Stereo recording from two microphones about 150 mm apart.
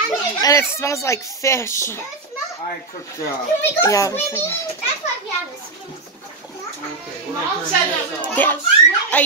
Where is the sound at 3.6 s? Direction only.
20° left (ahead or behind).